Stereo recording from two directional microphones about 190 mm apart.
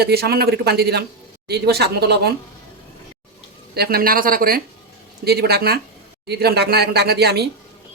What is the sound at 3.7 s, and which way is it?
Speech, 55° right (ahead or behind).